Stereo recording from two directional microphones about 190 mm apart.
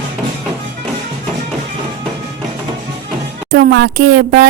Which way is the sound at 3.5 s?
60° right (ahead or behind).